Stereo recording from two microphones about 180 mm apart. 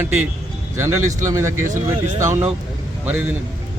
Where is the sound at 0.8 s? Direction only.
15° right (ahead or behind).